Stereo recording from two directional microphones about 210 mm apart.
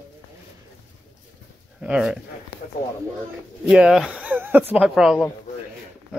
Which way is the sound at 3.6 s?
5° right (ahead or behind).